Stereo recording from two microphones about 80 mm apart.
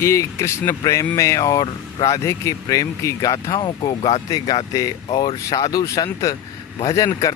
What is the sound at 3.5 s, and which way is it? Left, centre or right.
Speech, left.